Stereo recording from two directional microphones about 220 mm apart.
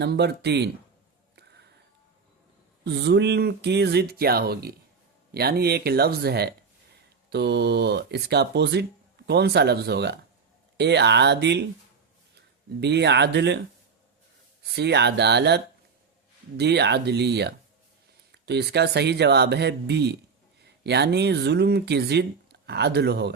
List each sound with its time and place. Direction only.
0.0 s speech: 50° right (ahead or behind)
2.8 s speech: 50° right (ahead or behind)
12.8 s speech: 50° right (ahead or behind)
14.7 s speech: 50° right (ahead or behind)